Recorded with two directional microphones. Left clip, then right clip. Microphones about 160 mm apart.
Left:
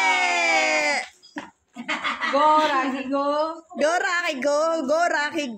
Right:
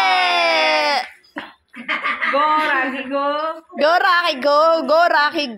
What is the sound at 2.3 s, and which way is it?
Speech, 20° left (ahead or behind).